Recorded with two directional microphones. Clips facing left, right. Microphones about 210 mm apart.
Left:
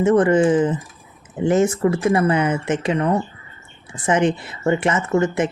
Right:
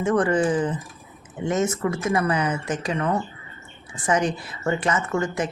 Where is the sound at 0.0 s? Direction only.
25° left (ahead or behind).